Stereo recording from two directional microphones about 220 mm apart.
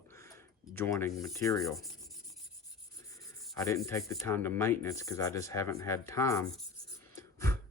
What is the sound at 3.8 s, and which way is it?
Speech, 15° left (ahead or behind).